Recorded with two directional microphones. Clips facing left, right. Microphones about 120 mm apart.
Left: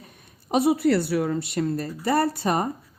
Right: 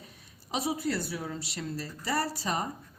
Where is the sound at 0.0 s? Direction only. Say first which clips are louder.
Left 3 dB; 55° left (ahead or behind).